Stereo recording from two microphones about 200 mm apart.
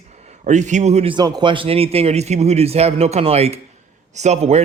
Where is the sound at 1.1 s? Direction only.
25° right (ahead or behind).